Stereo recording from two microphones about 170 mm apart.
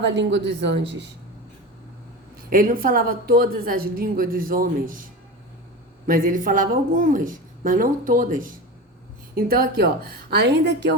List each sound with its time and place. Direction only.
0.1 s a woman's voice: 90° right
2.5 s a woman's voice: 55° right (ahead or behind)
6.1 s a woman's voice: 55° right (ahead or behind); by 10.9 s 90° right